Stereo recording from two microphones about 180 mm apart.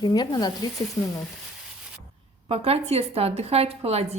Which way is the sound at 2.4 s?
35° right (ahead or behind).